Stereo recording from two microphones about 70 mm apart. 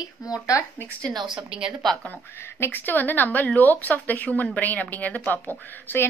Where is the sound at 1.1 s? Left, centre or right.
Right.